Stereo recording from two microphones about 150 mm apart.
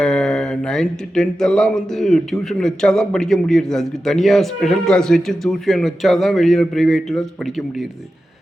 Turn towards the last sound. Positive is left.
turn(degrees=0)  # may be behind; listen again after turning